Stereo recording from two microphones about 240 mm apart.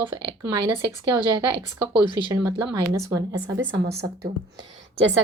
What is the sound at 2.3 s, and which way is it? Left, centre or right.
A woman's voice, centre.